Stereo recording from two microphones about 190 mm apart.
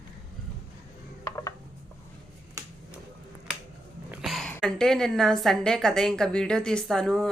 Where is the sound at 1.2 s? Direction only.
15° left (ahead or behind).